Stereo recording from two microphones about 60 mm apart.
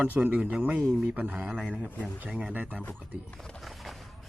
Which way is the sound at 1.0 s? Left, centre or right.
Right.